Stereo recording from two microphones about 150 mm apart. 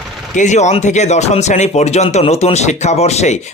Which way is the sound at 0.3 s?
50° left (ahead or behind).